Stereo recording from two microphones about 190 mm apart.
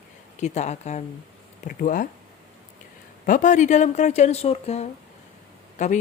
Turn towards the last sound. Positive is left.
turn(degrees=40)  # may be behind; listen again after turning